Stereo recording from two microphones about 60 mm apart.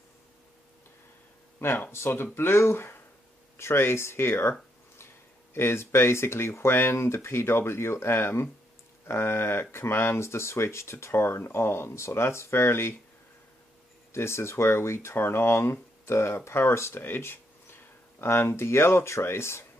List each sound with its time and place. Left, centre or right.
1.9 s speech: left
14.1 s speech: left